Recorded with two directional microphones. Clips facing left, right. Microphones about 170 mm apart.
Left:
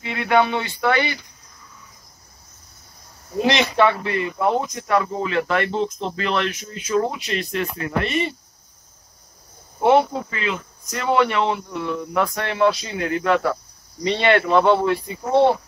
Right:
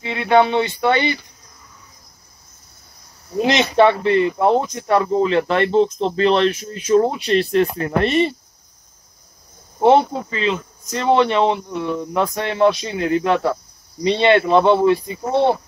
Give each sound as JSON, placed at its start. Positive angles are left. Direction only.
{"t": 0.0, "sound": "speech", "side_deg": -20}
{"t": 3.4, "sound": "speech", "side_deg": -25}
{"t": 9.8, "sound": "speech", "side_deg": -30}